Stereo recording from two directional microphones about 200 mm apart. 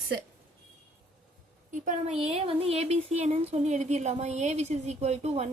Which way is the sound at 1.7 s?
40° right (ahead or behind).